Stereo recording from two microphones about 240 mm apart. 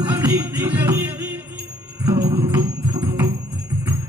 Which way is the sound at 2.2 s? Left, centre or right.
Right.